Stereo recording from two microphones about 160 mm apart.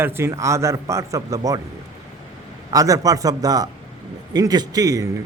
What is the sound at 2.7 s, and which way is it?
Speech, 20° right (ahead or behind).